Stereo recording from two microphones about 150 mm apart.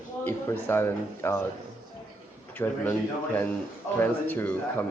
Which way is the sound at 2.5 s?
10° left (ahead or behind).